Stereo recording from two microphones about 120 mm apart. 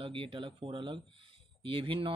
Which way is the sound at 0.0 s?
50° right (ahead or behind).